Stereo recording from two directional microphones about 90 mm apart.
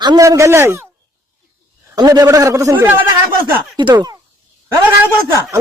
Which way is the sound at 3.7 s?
55° right (ahead or behind).